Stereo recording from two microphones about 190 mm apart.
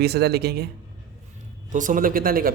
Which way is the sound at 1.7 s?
45° right (ahead or behind).